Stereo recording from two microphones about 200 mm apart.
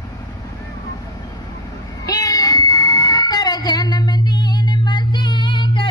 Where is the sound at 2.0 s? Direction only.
20° left (ahead or behind).